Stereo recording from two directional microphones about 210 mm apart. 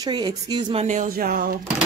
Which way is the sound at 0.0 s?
20° right (ahead or behind).